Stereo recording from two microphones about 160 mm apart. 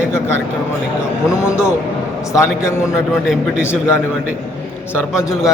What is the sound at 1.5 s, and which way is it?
Speech, 5° right (ahead or behind).